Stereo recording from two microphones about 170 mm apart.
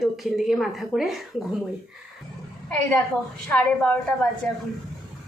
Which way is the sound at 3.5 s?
5° left (ahead or behind).